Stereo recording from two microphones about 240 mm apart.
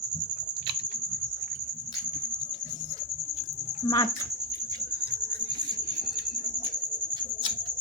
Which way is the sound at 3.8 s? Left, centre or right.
Centre.